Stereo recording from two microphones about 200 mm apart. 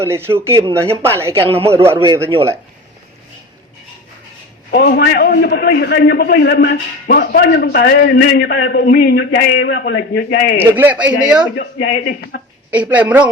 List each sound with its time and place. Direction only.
0.0 s speech: 10° right (ahead or behind)
4.7 s a man's voice: 50° left (ahead or behind)
10.6 s a man's voice: 10° right (ahead or behind)
11.5 s a man's voice: 55° left (ahead or behind)
12.7 s speech: 5° right (ahead or behind)